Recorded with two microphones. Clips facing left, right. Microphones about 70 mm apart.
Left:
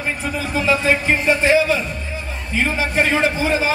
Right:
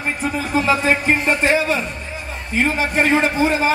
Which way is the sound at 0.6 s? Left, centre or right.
Right.